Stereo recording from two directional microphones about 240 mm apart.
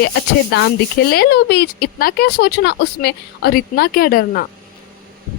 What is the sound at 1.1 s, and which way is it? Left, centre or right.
Speech, left.